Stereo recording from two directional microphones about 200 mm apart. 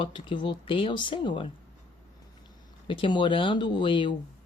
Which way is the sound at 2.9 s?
25° left (ahead or behind).